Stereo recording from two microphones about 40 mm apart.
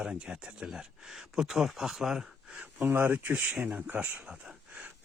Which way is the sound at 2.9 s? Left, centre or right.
Right.